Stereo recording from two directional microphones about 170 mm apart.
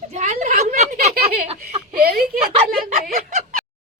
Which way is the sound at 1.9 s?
60° right (ahead or behind).